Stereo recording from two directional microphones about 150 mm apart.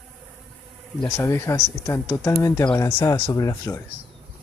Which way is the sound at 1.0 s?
15° left (ahead or behind).